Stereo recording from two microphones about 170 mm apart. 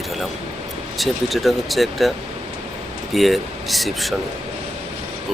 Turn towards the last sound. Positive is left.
turn(degrees=0)  # may be behind; listen again after turning